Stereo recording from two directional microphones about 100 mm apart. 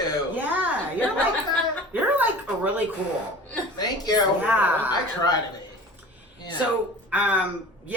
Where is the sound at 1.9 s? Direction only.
20° right (ahead or behind).